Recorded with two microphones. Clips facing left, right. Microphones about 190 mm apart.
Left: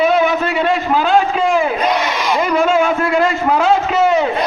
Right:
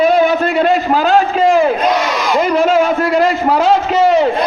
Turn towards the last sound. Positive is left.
turn(degrees=-35)  # may be behind; listen again after turning